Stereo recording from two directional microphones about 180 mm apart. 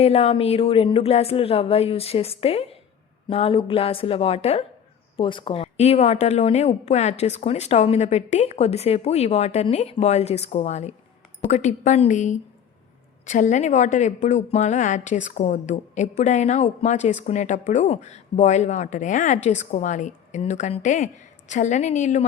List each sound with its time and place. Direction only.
0.0 s a woman's voice: 35° left (ahead or behind)